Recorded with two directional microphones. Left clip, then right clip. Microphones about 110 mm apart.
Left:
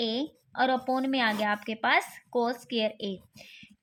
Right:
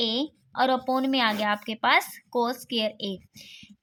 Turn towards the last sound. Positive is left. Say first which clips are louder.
# right 3 dB
turn(degrees=-30)  # may be behind; listen again after turning